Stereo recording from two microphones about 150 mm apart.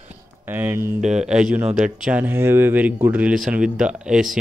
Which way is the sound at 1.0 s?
5° right (ahead or behind).